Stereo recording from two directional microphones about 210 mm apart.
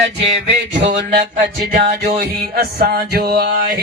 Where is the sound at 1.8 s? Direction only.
50° right (ahead or behind).